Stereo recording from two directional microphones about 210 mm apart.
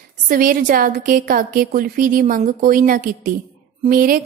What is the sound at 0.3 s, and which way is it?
A woman's voice, 40° right (ahead or behind).